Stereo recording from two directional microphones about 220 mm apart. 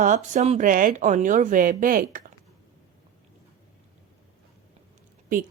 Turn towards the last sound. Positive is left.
turn(degrees=-40)  # may be behind; listen again after turning